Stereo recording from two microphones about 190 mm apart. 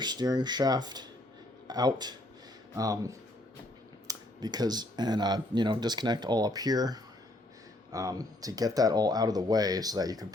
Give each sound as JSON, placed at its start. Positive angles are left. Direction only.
{"t": 0.0, "sound": "speech", "side_deg": -20}